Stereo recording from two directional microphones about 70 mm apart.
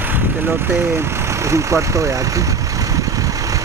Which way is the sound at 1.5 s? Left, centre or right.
Right.